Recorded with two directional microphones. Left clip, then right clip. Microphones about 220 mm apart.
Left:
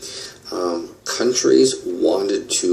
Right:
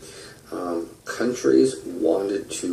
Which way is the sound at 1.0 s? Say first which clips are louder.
Left 5 dB; 30° left (ahead or behind).